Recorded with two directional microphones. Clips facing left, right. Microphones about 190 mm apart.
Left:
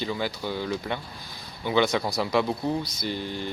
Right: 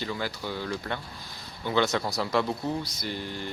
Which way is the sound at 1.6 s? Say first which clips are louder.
Left 2 dB; 15° left (ahead or behind).